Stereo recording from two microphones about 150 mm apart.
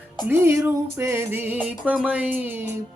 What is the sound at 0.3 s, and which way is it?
Music, 15° right (ahead or behind).